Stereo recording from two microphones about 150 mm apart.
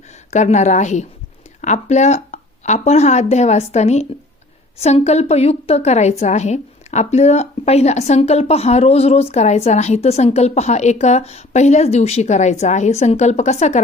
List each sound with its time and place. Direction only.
0.3 s a woman's voice: 50° left (ahead or behind)